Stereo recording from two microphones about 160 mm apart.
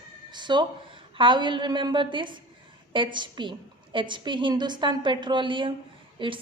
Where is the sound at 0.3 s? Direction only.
30° right (ahead or behind).